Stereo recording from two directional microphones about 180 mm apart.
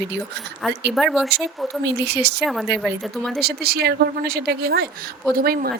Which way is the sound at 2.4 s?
Centre (ahead or behind).